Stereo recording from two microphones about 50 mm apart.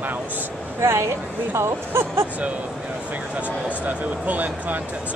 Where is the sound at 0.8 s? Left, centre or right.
Right.